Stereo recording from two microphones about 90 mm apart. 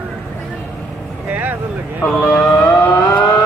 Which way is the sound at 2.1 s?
10° left (ahead or behind).